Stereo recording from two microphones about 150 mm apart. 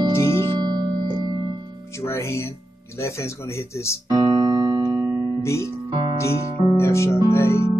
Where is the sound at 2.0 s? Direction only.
20° left (ahead or behind).